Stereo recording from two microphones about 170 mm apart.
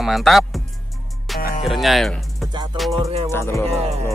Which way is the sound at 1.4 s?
60° left (ahead or behind).